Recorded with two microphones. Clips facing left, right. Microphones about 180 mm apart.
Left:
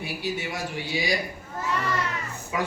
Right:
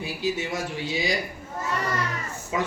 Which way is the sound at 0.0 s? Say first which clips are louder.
Right 3 dB; 25° right (ahead or behind).